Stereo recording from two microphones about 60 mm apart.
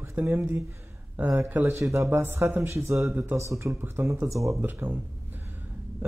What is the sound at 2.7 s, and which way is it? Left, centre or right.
Speech, right.